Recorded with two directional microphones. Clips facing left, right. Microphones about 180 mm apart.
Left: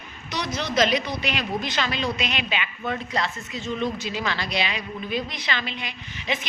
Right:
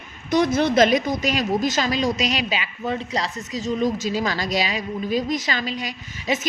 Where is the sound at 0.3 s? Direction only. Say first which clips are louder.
Right 10 dB; 50° right (ahead or behind).